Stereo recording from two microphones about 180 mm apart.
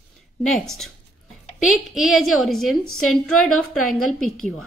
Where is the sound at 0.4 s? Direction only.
Centre (ahead or behind).